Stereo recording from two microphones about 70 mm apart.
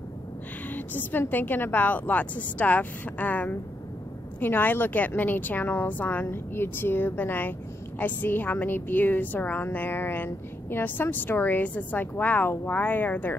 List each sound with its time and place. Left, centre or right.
0.7 s a woman's voice: left